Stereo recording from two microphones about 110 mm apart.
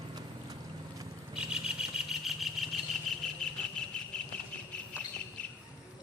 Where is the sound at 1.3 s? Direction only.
5° right (ahead or behind).